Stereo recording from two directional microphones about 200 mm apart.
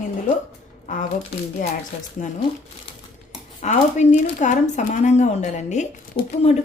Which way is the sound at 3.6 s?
35° left (ahead or behind).